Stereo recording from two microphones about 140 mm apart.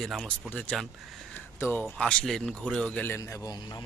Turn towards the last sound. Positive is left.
turn(degrees=30)  # may be behind; listen again after turning